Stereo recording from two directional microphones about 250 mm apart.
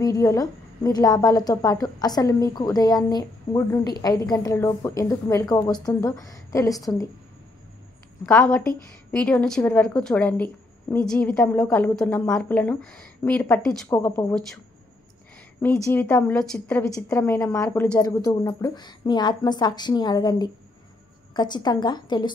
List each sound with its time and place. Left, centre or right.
0.0 s a woman's voice: centre
8.3 s a woman's voice: centre
15.9 s a woman's voice: centre